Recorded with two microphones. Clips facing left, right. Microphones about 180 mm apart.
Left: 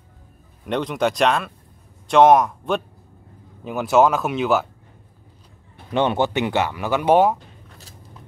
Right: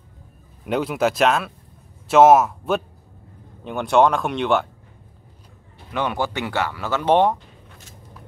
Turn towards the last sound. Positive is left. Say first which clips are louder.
# left 1 dB
turn(degrees=5)  # may be behind; listen again after turning